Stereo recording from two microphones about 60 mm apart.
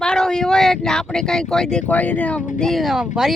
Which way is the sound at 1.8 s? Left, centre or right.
Left.